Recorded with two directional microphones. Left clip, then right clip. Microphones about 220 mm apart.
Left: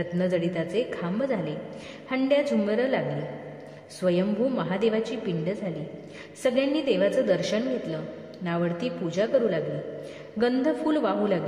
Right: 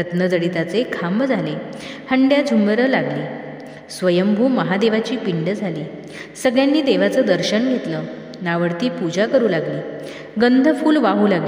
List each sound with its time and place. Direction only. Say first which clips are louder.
0.0 s a woman's voice: right 7 dB; 35° right (ahead or behind)